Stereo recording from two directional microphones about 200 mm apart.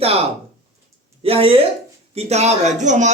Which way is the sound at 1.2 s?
30° right (ahead or behind).